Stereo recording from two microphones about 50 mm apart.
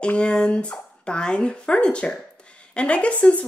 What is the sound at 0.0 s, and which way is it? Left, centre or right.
Speech, left.